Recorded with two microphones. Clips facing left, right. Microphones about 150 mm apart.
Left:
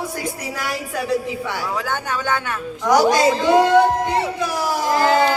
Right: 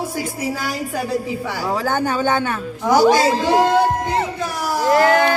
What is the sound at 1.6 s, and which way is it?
Speech, 30° right (ahead or behind).